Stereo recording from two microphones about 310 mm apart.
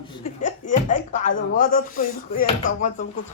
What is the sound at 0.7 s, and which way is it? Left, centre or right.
Speech, left.